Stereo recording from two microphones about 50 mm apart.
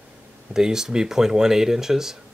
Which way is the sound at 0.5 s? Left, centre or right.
Centre.